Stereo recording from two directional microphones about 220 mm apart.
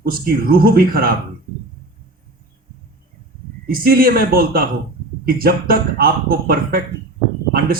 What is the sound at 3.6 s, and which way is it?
A man's voice, 45° right (ahead or behind).